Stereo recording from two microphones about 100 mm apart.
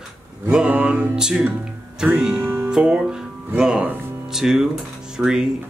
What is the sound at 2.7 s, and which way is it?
Music, 10° right (ahead or behind).